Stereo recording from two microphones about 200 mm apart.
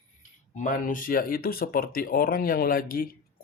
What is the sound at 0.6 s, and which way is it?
Speech, 40° left (ahead or behind).